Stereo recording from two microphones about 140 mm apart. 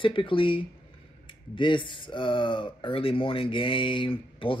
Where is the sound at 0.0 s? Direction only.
40° left (ahead or behind).